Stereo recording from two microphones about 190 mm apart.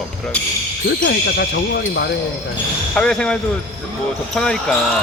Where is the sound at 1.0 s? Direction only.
60° left (ahead or behind).